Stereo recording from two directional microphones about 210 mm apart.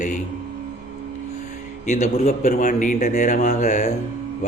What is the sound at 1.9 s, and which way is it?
A man's voice, 35° left (ahead or behind).